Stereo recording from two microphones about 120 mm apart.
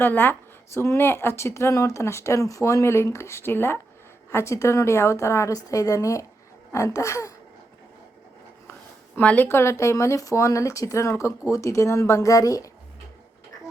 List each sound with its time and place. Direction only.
0.0 s speech: 15° left (ahead or behind)
9.1 s speech: 15° left (ahead or behind)